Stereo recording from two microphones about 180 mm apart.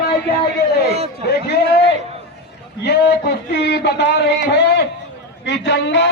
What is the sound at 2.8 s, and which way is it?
A man's voice, 70° left (ahead or behind).